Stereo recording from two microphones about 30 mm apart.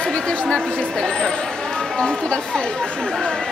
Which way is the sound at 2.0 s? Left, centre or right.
Left.